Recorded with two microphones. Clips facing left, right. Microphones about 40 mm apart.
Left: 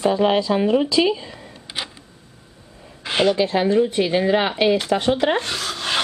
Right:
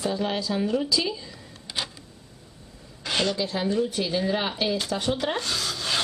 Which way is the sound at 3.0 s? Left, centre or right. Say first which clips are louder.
Left 7 dB; left.